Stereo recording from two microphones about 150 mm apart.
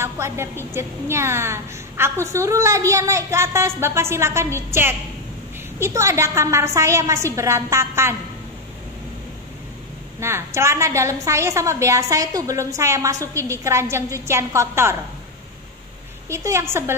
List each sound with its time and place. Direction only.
0.0 s a sound: 15° right (ahead or behind)
0.7 s a woman's voice: 15° right (ahead or behind)
10.2 s a woman's voice: 15° right (ahead or behind)
16.3 s a woman's voice: 20° right (ahead or behind)